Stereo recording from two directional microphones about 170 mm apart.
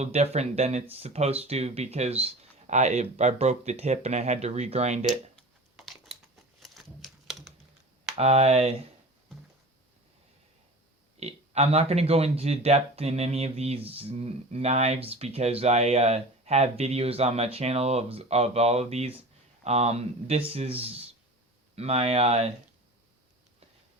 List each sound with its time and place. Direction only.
0.0 s speech: 40° right (ahead or behind)
5.0 s a sound: centre (ahead or behind)
8.1 s speech: 40° right (ahead or behind)
11.2 s speech: 40° right (ahead or behind)